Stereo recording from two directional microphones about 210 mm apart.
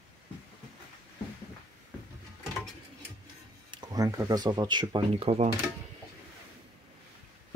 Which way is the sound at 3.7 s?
20° right (ahead or behind).